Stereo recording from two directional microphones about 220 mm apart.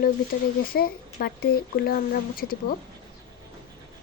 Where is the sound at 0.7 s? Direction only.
45° left (ahead or behind).